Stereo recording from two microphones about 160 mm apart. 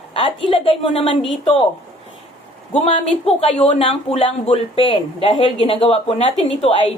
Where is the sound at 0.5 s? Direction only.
35° left (ahead or behind).